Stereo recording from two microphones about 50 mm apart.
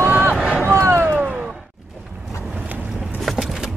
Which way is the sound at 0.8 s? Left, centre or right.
Right.